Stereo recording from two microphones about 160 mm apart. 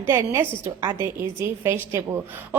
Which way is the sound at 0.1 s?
15° right (ahead or behind).